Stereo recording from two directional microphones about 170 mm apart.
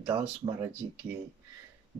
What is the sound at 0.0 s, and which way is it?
Speech, 10° right (ahead or behind).